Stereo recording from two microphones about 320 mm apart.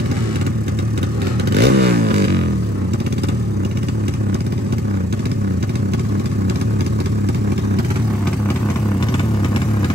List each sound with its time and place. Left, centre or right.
1.5 s vehicle: right